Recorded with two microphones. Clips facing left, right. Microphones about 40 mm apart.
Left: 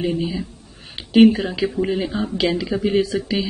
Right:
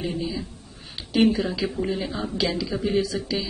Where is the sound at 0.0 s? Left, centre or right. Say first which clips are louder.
Left 6 dB; left.